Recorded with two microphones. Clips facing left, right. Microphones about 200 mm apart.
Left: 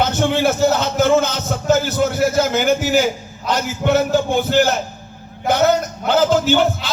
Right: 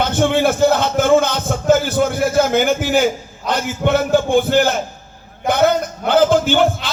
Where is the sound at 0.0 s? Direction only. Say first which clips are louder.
Right 1 dB; 50° right (ahead or behind).